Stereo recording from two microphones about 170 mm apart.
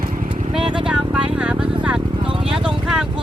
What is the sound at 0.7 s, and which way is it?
Vehicle, 5° right (ahead or behind).